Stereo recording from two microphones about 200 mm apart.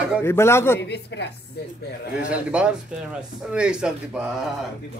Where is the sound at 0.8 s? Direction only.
60° left (ahead or behind).